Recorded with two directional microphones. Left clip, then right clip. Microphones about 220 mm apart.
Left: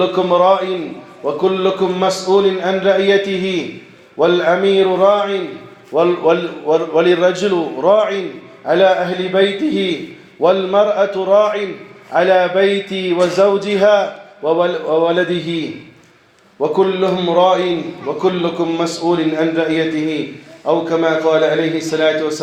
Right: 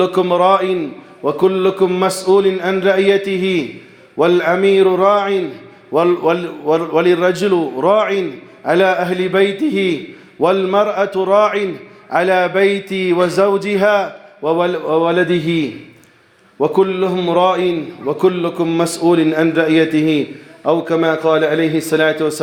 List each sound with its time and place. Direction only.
0.0 s a man's voice: 55° right (ahead or behind)
16.6 s a man's voice: 50° right (ahead or behind)